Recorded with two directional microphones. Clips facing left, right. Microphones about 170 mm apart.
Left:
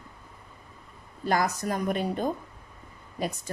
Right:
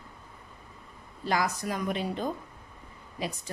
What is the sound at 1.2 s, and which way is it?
Speech, 45° left (ahead or behind).